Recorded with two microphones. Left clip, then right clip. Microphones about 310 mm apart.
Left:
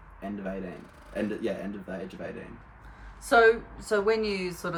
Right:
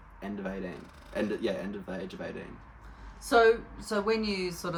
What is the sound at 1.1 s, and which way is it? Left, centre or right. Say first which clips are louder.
Speech: even; centre.